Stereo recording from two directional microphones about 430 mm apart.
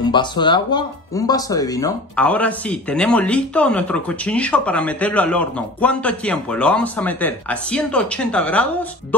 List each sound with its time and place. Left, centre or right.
0.0 s speech: centre